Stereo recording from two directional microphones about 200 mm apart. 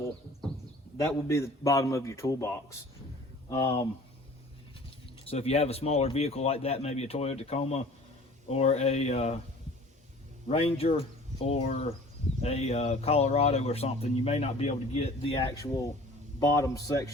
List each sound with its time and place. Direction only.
0.9 s a man's voice: 15° left (ahead or behind)
3.5 s speech: 25° left (ahead or behind)
5.2 s a man's voice: 30° left (ahead or behind)
10.5 s a man's voice: 30° left (ahead or behind)
15.4 s a man's voice: 15° left (ahead or behind)